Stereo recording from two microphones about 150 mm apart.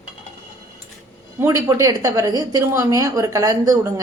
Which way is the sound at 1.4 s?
20° right (ahead or behind).